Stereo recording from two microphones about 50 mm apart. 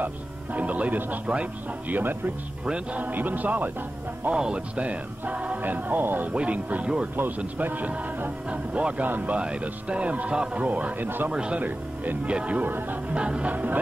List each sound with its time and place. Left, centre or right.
0.0 s speech: right
2.0 s speech: right
2.6 s speech: right
3.0 s speech: right
4.3 s speech: centre; by 6.3 s right
6.3 s speech: right
9.4 s speech: centre
11.6 s speech: right
12.7 s speech: right
13.1 s speech: right